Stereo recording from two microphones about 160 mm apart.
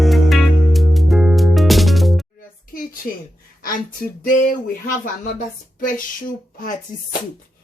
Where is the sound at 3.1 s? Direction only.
65° left (ahead or behind).